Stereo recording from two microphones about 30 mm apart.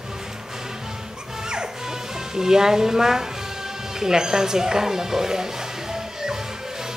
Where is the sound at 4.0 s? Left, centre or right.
Right.